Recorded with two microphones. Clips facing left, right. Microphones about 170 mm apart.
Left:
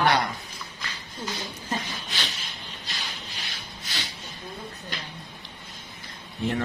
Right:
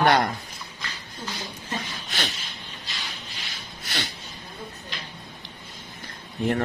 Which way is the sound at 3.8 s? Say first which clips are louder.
Right 6 dB; 60° right (ahead or behind).